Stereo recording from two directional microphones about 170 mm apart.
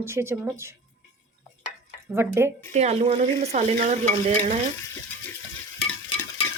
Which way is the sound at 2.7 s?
40° right (ahead or behind).